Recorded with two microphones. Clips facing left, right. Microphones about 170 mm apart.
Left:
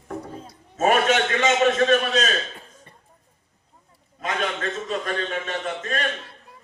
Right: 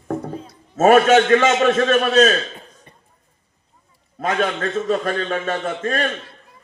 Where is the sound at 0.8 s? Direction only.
45° right (ahead or behind).